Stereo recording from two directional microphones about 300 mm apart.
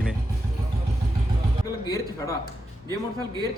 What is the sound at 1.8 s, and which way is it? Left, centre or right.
Speech, centre.